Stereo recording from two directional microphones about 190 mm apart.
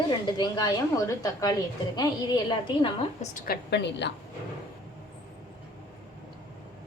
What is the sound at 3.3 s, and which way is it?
Speech, 50° left (ahead or behind).